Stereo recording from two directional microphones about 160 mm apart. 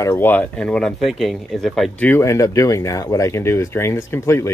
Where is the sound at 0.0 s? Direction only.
15° left (ahead or behind).